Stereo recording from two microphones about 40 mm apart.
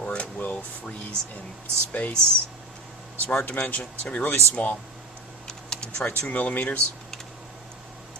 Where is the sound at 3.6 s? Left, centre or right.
Left.